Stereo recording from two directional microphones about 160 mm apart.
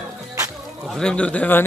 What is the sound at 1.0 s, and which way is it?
Speech, 5° left (ahead or behind).